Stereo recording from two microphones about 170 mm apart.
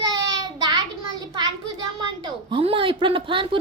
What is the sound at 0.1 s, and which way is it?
Child singing, 25° right (ahead or behind).